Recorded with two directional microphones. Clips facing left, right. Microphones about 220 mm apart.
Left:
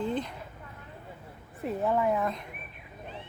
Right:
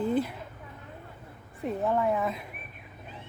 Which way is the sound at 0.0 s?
5° right (ahead or behind).